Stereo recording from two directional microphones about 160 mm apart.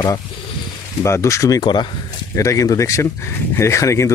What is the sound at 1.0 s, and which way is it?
Speech, 20° left (ahead or behind).